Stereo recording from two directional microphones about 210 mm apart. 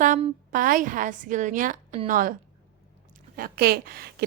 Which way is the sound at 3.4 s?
45° right (ahead or behind).